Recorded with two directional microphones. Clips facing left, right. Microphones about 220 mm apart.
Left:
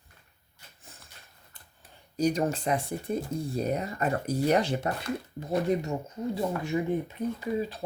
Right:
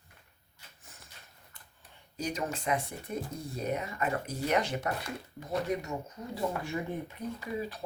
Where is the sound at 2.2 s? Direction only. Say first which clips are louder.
Left 8 dB; 40° left (ahead or behind).